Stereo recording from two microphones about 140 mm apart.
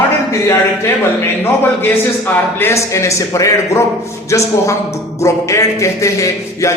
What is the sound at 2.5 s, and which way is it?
Speech, 20° left (ahead or behind).